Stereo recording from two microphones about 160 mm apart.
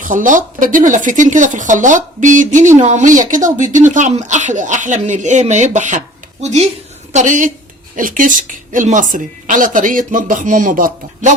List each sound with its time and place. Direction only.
0.0 s a woman's voice: 55° right (ahead or behind)